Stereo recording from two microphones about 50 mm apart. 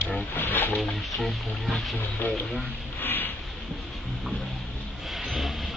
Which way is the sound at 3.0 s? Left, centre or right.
Left.